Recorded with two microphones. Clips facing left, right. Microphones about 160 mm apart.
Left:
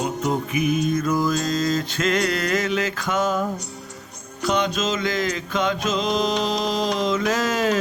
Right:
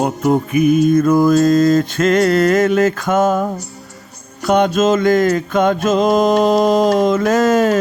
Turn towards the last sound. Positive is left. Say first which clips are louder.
# right 8 dB
turn(degrees=-50)  # may be behind; listen again after turning